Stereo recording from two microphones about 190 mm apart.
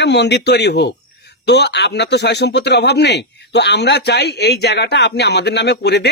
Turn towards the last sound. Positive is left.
turn(degrees=60)  # may be behind; listen again after turning